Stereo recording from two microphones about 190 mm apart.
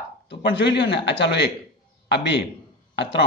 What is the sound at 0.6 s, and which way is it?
A man's voice, 65° left (ahead or behind).